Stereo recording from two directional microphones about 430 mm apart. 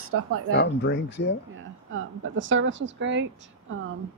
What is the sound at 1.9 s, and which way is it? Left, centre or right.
Speech, right.